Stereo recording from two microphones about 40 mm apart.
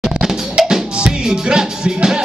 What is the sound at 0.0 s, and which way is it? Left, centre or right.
Music, centre.